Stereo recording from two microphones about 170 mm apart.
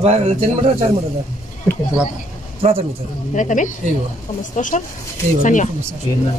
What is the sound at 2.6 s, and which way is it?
Speech, 35° right (ahead or behind).